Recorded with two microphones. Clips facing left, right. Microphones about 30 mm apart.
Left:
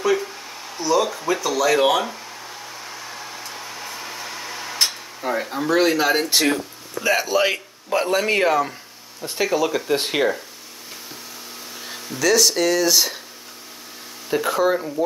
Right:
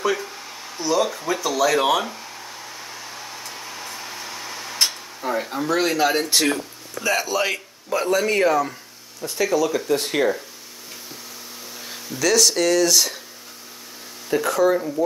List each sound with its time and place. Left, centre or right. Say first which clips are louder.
0.0 s a sound: left 3 dB; centre
8.1 s speech: right 1 dB; left
11.8 s speech: left 1 dB; centre
14.3 s speech: right 1 dB; centre